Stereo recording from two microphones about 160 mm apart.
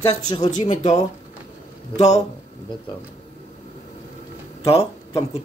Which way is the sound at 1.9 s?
45° left (ahead or behind).